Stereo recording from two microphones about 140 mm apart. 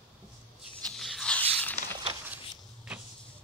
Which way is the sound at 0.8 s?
Centre (ahead or behind).